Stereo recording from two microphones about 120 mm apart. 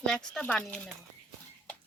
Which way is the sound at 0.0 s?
5° left (ahead or behind).